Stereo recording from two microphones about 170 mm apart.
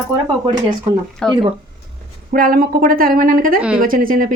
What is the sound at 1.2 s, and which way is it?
Speech, 5° left (ahead or behind).